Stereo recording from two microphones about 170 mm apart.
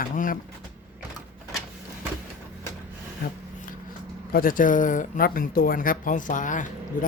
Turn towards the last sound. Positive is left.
turn(degrees=50)  # may be behind; listen again after turning